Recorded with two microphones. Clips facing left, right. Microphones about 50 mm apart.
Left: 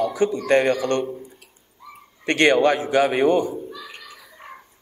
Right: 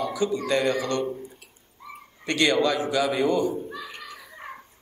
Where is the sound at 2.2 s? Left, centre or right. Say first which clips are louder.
Left 5 dB; left.